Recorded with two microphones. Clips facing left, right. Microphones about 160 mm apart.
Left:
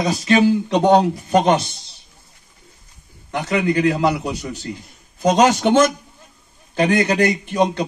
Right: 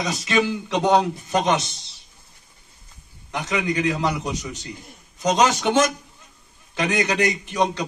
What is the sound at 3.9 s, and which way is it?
A man's voice, 30° left (ahead or behind).